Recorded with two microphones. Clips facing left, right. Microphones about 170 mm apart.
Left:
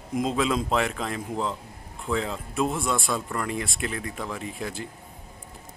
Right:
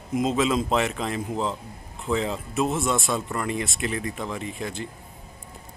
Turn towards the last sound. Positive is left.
turn(degrees=5)  # may be behind; listen again after turning